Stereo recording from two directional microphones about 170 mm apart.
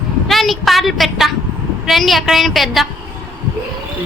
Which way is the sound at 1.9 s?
Centre (ahead or behind).